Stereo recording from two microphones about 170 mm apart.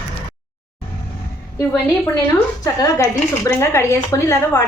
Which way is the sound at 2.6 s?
20° left (ahead or behind).